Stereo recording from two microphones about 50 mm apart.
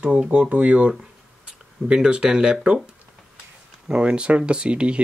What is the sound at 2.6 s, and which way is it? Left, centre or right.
Speech, centre.